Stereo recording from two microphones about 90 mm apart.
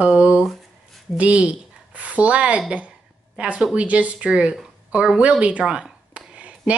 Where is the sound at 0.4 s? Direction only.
Centre (ahead or behind).